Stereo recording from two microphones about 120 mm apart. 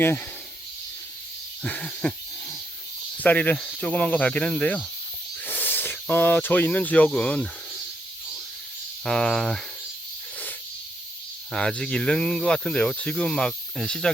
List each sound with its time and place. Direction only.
0.0 s speech: 15° left (ahead or behind)
1.6 s owl: 10° left (ahead or behind)
3.2 s speech: 15° left (ahead or behind)
9.0 s speech: 5° left (ahead or behind)
11.5 s speech: 5° left (ahead or behind)